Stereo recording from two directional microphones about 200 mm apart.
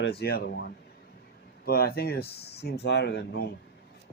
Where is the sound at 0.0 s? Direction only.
55° left (ahead or behind).